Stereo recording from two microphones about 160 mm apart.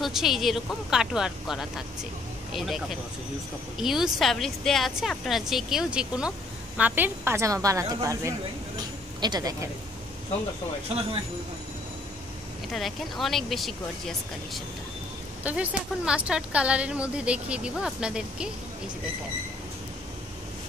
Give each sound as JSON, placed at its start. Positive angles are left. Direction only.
{"t": 0.0, "sound": "a woman's voice", "side_deg": 0}
{"t": 12.6, "sound": "a woman's voice", "side_deg": 0}